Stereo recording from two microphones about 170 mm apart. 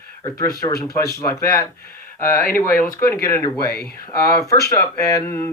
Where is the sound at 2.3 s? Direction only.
55° left (ahead or behind).